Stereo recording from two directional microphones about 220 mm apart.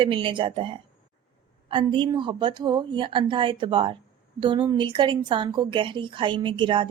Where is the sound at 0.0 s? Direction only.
25° right (ahead or behind).